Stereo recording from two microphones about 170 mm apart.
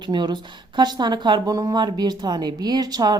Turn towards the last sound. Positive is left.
turn(degrees=-25)  # may be behind; listen again after turning